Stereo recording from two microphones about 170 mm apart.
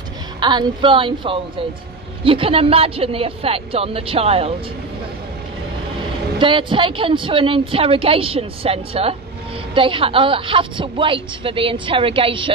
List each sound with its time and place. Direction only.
0.4 s a woman's voice: 25° right (ahead or behind)
6.3 s a woman's voice: 30° right (ahead or behind)